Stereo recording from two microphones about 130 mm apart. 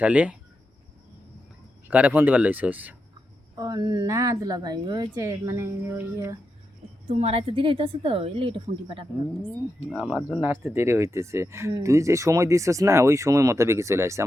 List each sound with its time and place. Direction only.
0.0 s speech: 10° right (ahead or behind)
1.9 s speech: 10° right (ahead or behind)
3.5 s speech: 30° right (ahead or behind)
7.1 s a woman's voice: 50° right (ahead or behind)
10.3 s speech: 15° right (ahead or behind)